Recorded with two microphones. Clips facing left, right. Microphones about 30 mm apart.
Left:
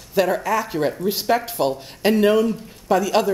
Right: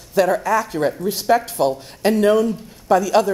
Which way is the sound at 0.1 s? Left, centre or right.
Centre.